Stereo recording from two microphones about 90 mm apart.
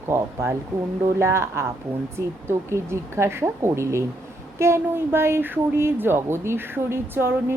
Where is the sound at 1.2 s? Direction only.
30° right (ahead or behind).